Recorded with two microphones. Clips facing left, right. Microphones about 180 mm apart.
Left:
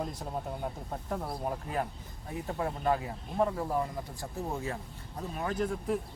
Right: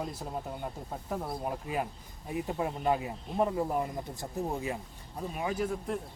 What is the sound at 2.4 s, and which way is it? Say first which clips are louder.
Speech: even; 15° right (ahead or behind).